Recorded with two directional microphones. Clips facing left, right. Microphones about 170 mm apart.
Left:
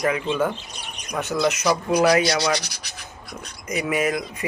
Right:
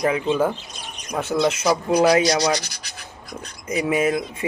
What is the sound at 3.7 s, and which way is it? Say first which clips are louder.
Speech: right 3 dB; 25° right (ahead or behind).